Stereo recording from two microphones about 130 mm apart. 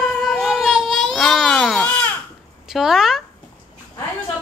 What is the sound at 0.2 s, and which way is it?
Baby cry, centre (ahead or behind).